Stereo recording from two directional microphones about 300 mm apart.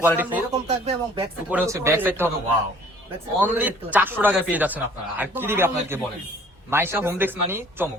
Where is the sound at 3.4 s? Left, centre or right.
Centre.